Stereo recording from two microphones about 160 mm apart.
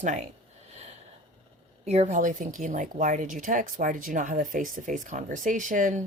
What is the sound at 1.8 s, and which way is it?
A woman's voice, 45° right (ahead or behind).